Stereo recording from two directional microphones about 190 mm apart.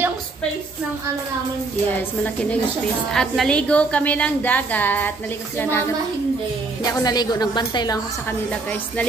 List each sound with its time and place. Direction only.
3.1 s a woman's voice: 5° left (ahead or behind); by 8.4 s 20° left (ahead or behind)